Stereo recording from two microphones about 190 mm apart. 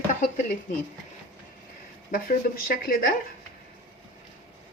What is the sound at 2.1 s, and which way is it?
Speech, 50° left (ahead or behind).